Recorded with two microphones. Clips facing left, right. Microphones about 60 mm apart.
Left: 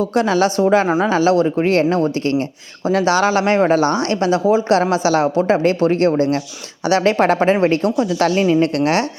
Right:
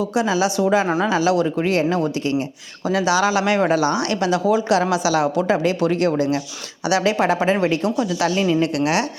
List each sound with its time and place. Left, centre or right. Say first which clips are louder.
0.0 s a woman's voice: left 4 dB; left
0.9 s speech: left 3 dB; left
1.1 s a woman's voice: left 4 dB; left